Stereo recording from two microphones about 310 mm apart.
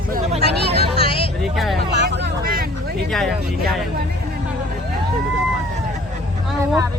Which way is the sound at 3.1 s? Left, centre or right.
Centre.